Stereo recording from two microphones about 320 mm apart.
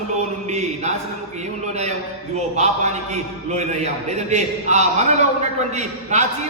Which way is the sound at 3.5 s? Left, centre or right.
Right.